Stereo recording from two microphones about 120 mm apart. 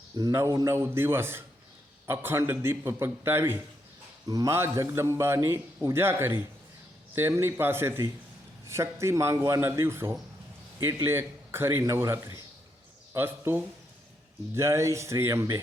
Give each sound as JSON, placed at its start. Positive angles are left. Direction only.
{"t": 0.2, "sound": "a man's voice", "side_deg": -25}